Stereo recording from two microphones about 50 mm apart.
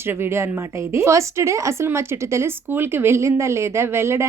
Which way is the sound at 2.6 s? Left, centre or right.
Right.